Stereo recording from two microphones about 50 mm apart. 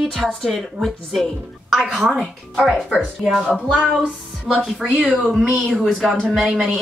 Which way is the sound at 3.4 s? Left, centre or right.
Centre.